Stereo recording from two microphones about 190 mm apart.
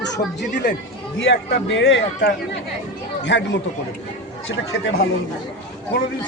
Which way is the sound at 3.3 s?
65° left (ahead or behind).